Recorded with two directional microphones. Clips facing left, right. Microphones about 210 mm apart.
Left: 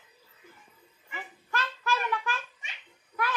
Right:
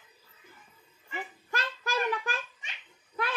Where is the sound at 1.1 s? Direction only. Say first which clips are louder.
Right 1 dB; 35° right (ahead or behind).